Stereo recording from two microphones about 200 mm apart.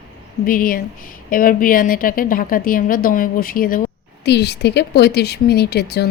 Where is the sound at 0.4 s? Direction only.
45° left (ahead or behind).